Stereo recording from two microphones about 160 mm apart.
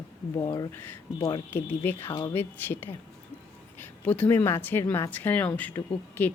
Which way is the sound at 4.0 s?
10° left (ahead or behind).